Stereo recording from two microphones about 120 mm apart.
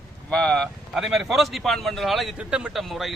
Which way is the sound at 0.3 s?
5° left (ahead or behind).